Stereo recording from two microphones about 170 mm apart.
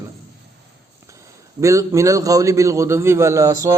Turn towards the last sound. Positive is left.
turn(degrees=-20)  # may be behind; listen again after turning